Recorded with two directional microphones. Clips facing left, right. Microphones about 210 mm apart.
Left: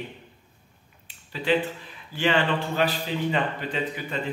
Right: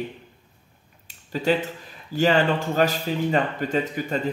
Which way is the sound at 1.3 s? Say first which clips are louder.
Right 2 dB; 40° right (ahead or behind).